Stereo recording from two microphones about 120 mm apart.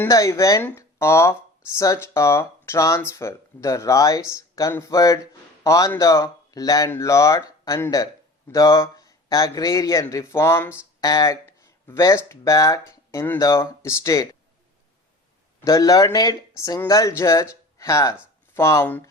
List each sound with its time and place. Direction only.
0.1 s a man's voice: 25° left (ahead or behind)
15.6 s a man's voice: 30° left (ahead or behind)